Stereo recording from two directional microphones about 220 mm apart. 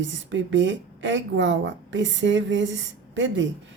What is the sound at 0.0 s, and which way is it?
A woman's voice, 60° right (ahead or behind).